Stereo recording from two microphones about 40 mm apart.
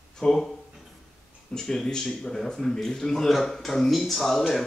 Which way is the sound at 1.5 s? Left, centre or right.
Centre.